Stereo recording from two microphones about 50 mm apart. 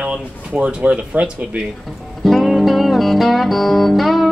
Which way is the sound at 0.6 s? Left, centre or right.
Right.